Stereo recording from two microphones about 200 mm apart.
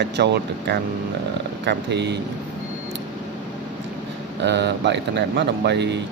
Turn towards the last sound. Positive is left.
turn(degrees=-60)  # may be behind; listen again after turning